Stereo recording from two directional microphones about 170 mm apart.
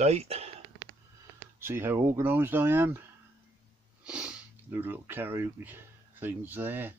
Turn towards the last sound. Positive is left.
turn(degrees=-10)  # may be behind; listen again after turning